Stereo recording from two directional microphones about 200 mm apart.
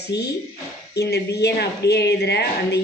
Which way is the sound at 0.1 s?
60° left (ahead or behind).